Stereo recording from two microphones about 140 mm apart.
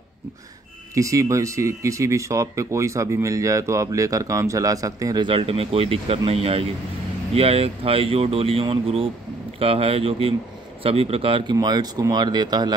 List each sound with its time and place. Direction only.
0.9 s a man's voice: 20° right (ahead or behind); by 11.5 s 40° right (ahead or behind)
11.5 s speech: 30° right (ahead or behind)